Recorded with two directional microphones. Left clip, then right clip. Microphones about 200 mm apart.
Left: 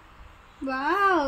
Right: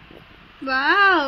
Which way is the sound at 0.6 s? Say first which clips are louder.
Right 7 dB; 5° right (ahead or behind).